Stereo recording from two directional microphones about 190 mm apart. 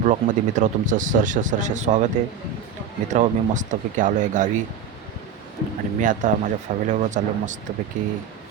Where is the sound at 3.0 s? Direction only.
40° right (ahead or behind).